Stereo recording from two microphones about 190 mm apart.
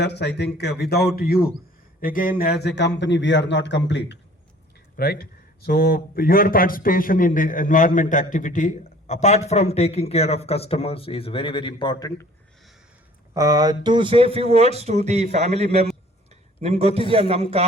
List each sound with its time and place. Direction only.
0.0 s a man's voice: 65° left (ahead or behind)
4.9 s a man's voice: 55° left (ahead or behind); by 12.2 s 20° left (ahead or behind)
13.3 s speech: 15° right (ahead or behind)